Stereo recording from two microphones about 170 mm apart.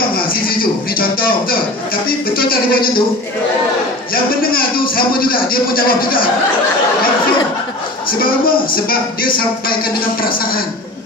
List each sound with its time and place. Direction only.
0.1 s a sound: 60° left (ahead or behind)
2.0 s speech: 60° left (ahead or behind)
4.1 s a man's voice: 60° left (ahead or behind)
8.1 s speech: 60° left (ahead or behind)